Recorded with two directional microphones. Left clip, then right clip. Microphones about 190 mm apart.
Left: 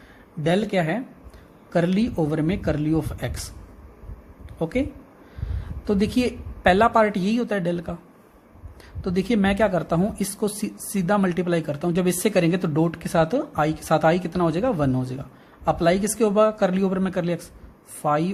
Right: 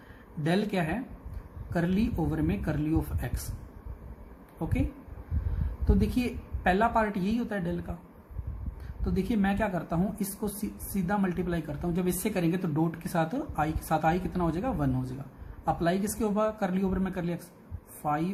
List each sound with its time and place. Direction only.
0.4 s speech: 30° left (ahead or behind)
4.6 s speech: 35° left (ahead or behind)
9.0 s speech: 35° left (ahead or behind)